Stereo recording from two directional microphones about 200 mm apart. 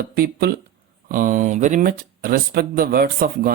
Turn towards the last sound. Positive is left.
turn(degrees=-50)  # may be behind; listen again after turning